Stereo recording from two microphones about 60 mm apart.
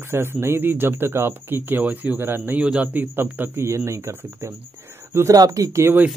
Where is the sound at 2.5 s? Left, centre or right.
Centre.